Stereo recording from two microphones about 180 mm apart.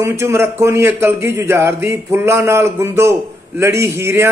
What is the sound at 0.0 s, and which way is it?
A man's voice, 15° right (ahead or behind).